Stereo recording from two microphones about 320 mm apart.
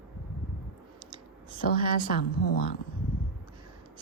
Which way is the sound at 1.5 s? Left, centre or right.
Left.